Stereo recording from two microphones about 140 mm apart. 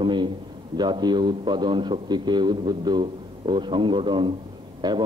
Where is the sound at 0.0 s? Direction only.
35° right (ahead or behind).